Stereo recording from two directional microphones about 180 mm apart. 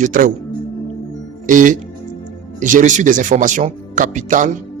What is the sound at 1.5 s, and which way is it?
Speech, 45° right (ahead or behind).